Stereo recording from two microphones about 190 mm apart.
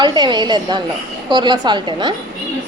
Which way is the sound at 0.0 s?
25° right (ahead or behind).